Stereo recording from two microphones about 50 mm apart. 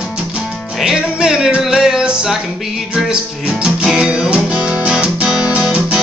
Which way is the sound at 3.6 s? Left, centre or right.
Centre.